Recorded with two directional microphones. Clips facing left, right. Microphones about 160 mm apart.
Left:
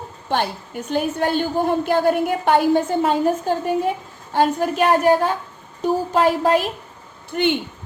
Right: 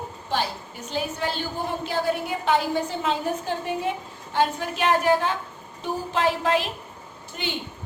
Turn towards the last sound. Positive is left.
turn(degrees=60)  # may be behind; listen again after turning